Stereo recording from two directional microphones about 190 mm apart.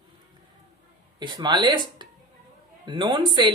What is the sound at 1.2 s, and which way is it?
Speech, 25° right (ahead or behind).